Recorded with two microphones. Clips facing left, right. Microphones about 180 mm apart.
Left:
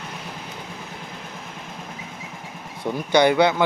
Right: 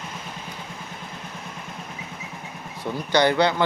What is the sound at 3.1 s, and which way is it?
Speech, 10° left (ahead or behind).